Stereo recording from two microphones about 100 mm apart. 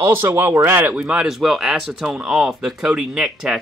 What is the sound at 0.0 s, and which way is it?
Speech, 25° right (ahead or behind).